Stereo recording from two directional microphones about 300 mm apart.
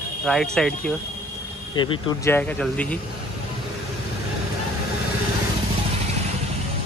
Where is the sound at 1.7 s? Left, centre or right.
Centre.